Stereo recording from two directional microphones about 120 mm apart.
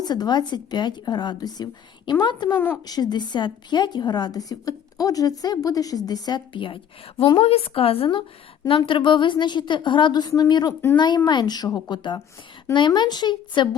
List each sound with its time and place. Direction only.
0.0 s a woman's voice: 35° left (ahead or behind)